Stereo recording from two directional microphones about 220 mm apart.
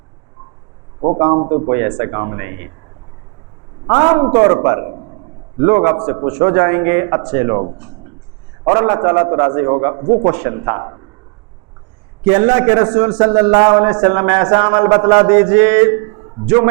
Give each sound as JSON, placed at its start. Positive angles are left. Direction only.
{"t": 1.2, "sound": "a man's voice", "side_deg": -25}
{"t": 1.7, "sound": "a man's voice", "side_deg": -15}
{"t": 3.8, "sound": "a man's voice", "side_deg": -25}
{"t": 8.6, "sound": "a man's voice", "side_deg": -20}
{"t": 12.2, "sound": "a man's voice", "side_deg": -15}